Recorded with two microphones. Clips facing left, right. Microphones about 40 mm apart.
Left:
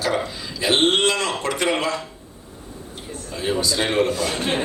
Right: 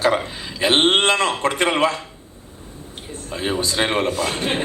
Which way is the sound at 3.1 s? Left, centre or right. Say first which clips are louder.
Even; right.